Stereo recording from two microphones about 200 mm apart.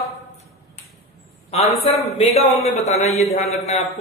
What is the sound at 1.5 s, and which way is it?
A man's voice, 35° left (ahead or behind).